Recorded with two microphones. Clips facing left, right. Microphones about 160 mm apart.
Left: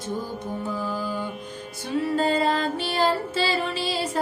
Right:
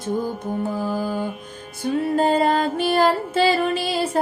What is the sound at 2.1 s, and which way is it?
Music, 55° right (ahead or behind).